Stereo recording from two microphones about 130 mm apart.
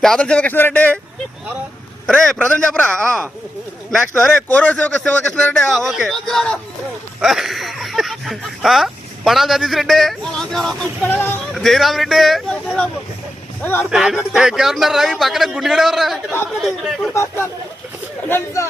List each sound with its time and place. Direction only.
0.0 s speech: 5° left (ahead or behind)
2.0 s speech: 5° left (ahead or behind)
11.0 s speech: 15° left (ahead or behind)
11.3 s speech: 5° left (ahead or behind)
13.6 s speech: 15° left (ahead or behind)
13.9 s speech: 5° right (ahead or behind)
17.2 s speech: 20° left (ahead or behind)